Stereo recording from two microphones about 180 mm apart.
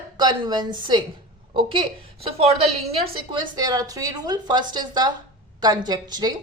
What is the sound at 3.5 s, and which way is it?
A woman's voice, 20° right (ahead or behind).